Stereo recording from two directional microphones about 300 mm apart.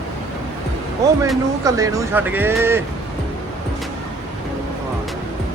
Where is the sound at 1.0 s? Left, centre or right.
Centre.